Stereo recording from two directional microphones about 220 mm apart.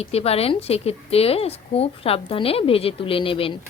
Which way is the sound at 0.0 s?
25° left (ahead or behind).